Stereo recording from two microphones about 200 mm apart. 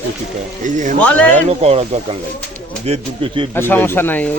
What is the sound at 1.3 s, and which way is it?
Speech, 30° right (ahead or behind).